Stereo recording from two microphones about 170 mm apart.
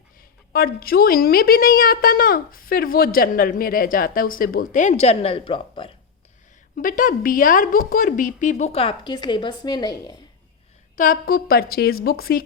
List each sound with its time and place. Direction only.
0.2 s a woman's voice: 60° left (ahead or behind); by 5.9 s 30° left (ahead or behind)
6.7 s a woman's voice: 55° left (ahead or behind); by 10.2 s 25° left (ahead or behind)
10.9 s a woman's voice: 55° left (ahead or behind)